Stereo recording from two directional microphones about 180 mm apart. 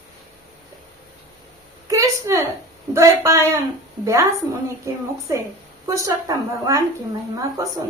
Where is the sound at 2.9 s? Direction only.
15° right (ahead or behind).